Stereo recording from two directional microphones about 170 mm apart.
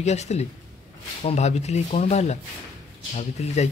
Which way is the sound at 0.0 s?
40° left (ahead or behind).